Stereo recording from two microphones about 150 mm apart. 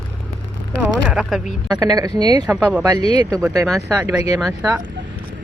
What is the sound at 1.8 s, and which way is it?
Speech, 25° right (ahead or behind).